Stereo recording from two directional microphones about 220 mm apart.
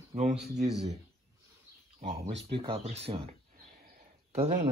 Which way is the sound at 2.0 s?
30° right (ahead or behind).